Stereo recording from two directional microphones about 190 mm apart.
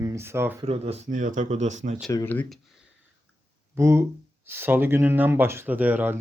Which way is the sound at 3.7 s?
15° right (ahead or behind).